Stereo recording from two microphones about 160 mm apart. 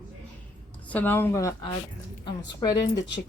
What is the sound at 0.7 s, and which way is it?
A woman's voice, 10° left (ahead or behind).